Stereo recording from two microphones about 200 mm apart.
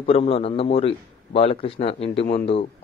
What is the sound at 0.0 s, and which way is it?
A man's voice, 30° left (ahead or behind).